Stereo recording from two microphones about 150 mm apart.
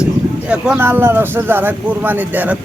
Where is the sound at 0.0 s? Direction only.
5° right (ahead or behind).